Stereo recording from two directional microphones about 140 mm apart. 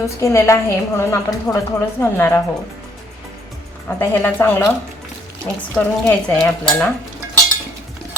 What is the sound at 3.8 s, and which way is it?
Speech, 15° left (ahead or behind).